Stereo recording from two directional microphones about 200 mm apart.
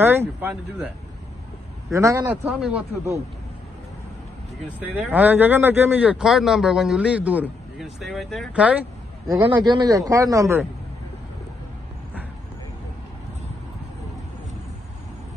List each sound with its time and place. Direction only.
0.0 s a man's voice: 10° right (ahead or behind)
1.9 s a man's voice: 15° right (ahead or behind)
4.7 s a man's voice: 10° right (ahead or behind)
9.6 s a man's voice: 20° right (ahead or behind)